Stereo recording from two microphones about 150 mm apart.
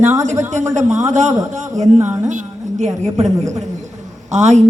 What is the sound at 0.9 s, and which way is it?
Speech, 50° right (ahead or behind).